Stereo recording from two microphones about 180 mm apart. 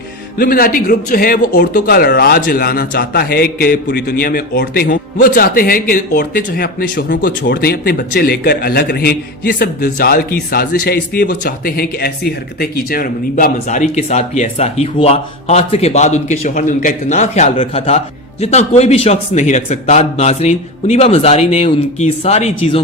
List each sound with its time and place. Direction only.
0.3 s speech: 55° left (ahead or behind); by 22.8 s 35° left (ahead or behind)